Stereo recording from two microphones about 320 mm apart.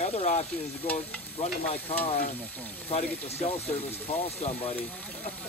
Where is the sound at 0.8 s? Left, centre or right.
Centre.